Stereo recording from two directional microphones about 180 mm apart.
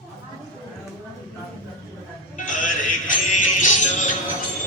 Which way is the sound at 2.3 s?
45° left (ahead or behind).